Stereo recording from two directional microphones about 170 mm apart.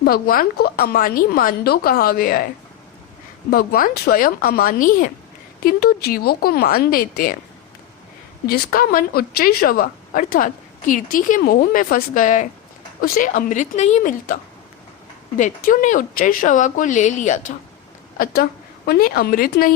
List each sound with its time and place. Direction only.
0.0 s a woman's voice: 60° left (ahead or behind)
3.5 s a woman's voice: 60° left (ahead or behind)
5.6 s a woman's voice: 65° left (ahead or behind)
8.4 s a woman's voice: 60° left (ahead or behind)
15.4 s a woman's voice: 50° left (ahead or behind)
18.9 s a woman's voice: 65° left (ahead or behind)